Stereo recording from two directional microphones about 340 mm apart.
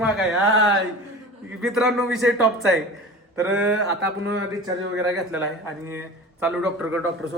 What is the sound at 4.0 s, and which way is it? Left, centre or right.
Speech, right.